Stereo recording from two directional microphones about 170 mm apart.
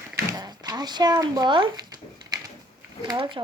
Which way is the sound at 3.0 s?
30° right (ahead or behind).